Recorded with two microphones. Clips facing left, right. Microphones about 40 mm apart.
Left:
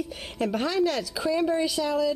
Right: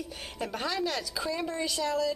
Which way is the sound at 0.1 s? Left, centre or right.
Centre.